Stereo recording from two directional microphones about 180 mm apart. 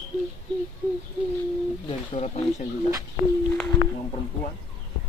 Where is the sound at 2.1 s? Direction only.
40° left (ahead or behind).